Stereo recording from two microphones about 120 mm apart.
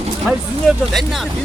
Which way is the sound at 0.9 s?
Centre (ahead or behind).